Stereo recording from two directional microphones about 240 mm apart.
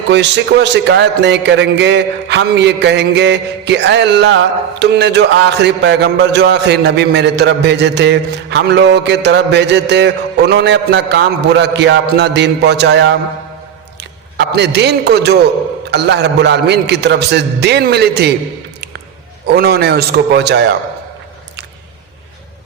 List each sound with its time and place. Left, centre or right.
0.1 s a man's voice: right
19.5 s a man's voice: right